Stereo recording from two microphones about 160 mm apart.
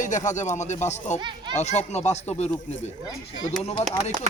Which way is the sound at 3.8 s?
45° left (ahead or behind).